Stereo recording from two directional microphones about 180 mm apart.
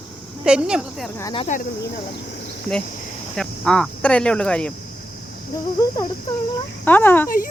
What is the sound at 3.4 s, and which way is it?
Speech, 5° left (ahead or behind).